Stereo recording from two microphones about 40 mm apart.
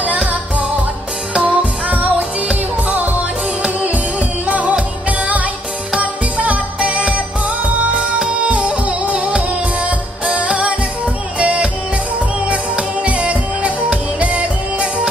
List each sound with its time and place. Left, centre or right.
1.3 s music: right
4.5 s music: right